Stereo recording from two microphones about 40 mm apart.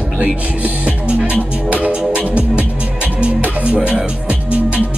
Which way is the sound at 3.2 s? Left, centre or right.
Right.